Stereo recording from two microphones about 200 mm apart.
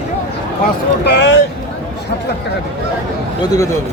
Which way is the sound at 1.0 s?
60° left (ahead or behind).